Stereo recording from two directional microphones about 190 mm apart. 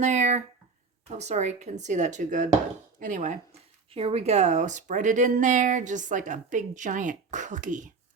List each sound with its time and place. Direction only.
0.0 s speech: 40° right (ahead or behind)
3.9 s speech: 30° right (ahead or behind)